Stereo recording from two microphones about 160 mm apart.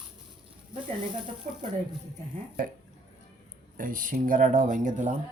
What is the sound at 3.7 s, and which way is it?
Speech, 60° right (ahead or behind).